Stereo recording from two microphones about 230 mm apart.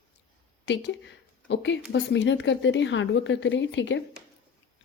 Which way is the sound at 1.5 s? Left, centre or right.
Left.